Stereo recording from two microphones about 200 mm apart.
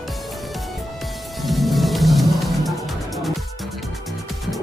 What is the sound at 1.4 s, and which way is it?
Music, centre (ahead or behind).